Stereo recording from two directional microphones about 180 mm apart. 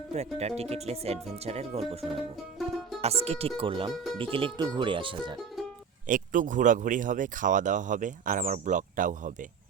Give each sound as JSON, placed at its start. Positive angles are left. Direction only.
{"t": 0.1, "sound": "speech", "side_deg": -35}
{"t": 3.9, "sound": "speech", "side_deg": 0}
{"t": 4.2, "sound": "speech", "side_deg": -30}
{"t": 6.1, "sound": "speech", "side_deg": -45}